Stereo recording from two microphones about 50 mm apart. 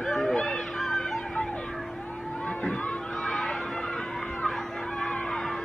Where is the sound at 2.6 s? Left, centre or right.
Left.